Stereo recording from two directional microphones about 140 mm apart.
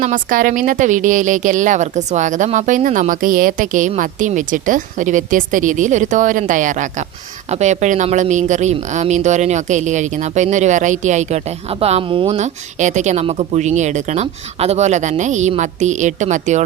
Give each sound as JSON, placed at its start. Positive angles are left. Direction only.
{"t": 0.0, "sound": "speech", "side_deg": -70}
{"t": 12.4, "sound": "speech", "side_deg": -60}